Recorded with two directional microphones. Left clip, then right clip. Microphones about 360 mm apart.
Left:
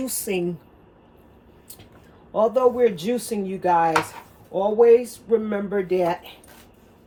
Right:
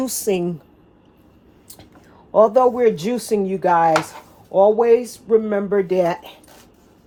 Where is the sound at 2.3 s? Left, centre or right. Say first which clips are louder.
Right 5 dB; centre.